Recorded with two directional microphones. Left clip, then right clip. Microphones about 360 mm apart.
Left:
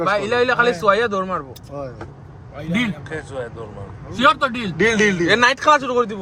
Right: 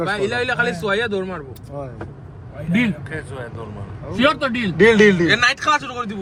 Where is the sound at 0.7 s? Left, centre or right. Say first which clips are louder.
Left 4 dB; left.